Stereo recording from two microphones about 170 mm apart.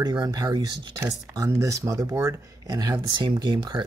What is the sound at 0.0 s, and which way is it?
Speech, 25° right (ahead or behind).